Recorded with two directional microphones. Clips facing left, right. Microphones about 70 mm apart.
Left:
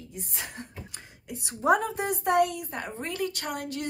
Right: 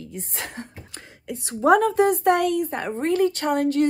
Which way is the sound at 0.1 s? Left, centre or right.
Right.